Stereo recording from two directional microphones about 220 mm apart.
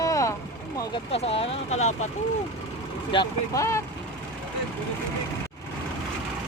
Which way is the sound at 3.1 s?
20° left (ahead or behind).